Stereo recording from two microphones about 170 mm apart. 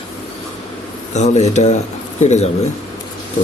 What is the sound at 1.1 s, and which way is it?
Speech, 40° left (ahead or behind).